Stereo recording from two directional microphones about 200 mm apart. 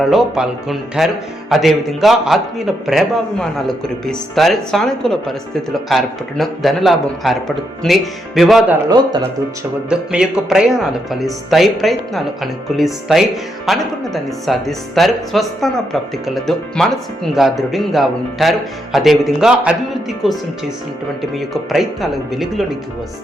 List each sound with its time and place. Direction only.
0.1 s speech: centre (ahead or behind)
8.9 s speech: 20° right (ahead or behind)
9.9 s speech: 5° right (ahead or behind)